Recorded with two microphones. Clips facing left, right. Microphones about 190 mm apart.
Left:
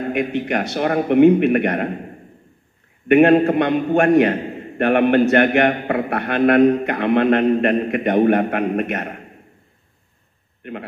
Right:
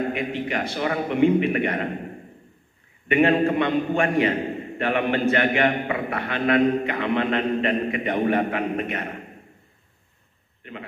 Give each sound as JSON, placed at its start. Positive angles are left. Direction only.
{"t": 0.1, "sound": "a man's voice", "side_deg": 60}
{"t": 3.1, "sound": "a man's voice", "side_deg": 60}